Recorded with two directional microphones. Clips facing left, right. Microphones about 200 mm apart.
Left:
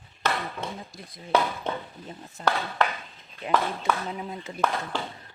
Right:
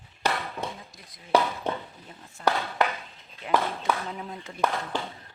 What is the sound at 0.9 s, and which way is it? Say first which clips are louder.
Speech: right 1 dB; 30° left (ahead or behind).